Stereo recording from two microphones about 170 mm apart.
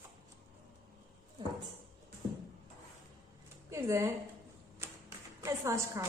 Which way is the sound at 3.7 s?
15° right (ahead or behind).